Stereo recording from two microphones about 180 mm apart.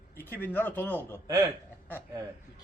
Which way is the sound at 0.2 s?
10° left (ahead or behind).